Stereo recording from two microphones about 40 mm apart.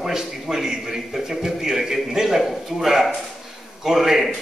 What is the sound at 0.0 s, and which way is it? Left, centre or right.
A man's voice, centre.